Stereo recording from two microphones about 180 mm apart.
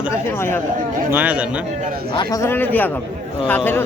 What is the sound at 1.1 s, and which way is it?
Speech, 10° right (ahead or behind).